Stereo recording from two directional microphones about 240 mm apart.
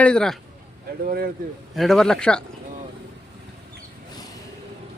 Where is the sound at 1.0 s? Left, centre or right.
Right.